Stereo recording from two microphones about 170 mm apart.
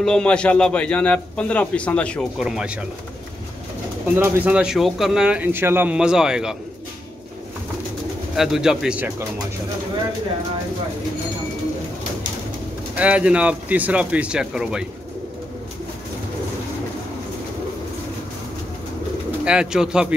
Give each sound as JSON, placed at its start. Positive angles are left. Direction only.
{"t": 0.0, "sound": "a man's voice", "side_deg": 5}
{"t": 4.1, "sound": "a man's voice", "side_deg": -10}
{"t": 8.4, "sound": "a man's voice", "side_deg": -5}
{"t": 12.9, "sound": "speech", "side_deg": -10}
{"t": 19.4, "sound": "a man's voice", "side_deg": -5}